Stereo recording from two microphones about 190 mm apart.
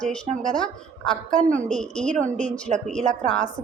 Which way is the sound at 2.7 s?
40° right (ahead or behind).